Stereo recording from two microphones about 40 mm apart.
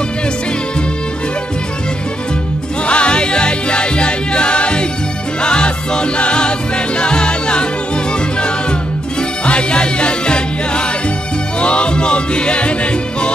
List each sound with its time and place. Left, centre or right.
2.9 s music: left
9.5 s music: left